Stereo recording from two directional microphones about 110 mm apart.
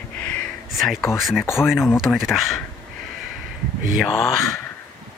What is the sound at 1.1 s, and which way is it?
Speech, centre (ahead or behind).